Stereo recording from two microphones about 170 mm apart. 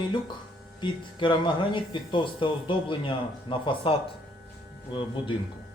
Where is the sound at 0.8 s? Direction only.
30° left (ahead or behind).